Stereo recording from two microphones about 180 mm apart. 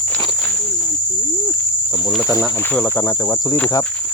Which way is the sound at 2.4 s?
10° left (ahead or behind).